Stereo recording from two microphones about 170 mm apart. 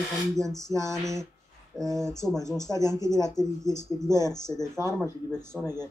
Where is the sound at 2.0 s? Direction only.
5° left (ahead or behind).